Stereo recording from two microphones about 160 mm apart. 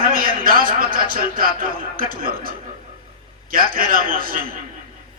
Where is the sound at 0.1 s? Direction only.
65° right (ahead or behind).